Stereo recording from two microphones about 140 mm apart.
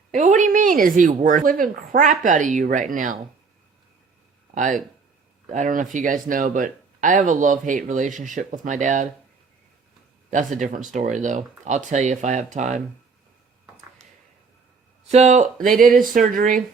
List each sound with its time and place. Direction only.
0.1 s speech: 60° right (ahead or behind)
4.5 s speech: 60° right (ahead or behind)
10.3 s speech: 65° right (ahead or behind)
15.0 s speech: 50° right (ahead or behind); by 16.6 s 70° right (ahead or behind)